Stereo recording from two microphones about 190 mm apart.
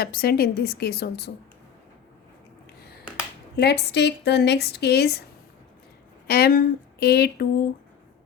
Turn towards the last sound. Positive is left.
turn(degrees=55)  # may be behind; listen again after turning